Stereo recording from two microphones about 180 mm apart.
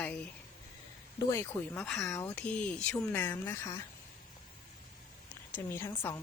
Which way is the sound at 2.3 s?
5° left (ahead or behind).